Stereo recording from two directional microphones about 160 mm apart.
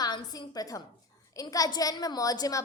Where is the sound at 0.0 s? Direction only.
25° left (ahead or behind).